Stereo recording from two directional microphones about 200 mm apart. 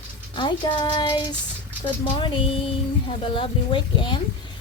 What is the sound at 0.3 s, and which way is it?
A woman's voice, 25° left (ahead or behind).